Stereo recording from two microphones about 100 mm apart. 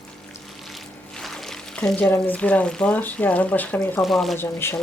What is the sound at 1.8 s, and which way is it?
Speech, 15° left (ahead or behind).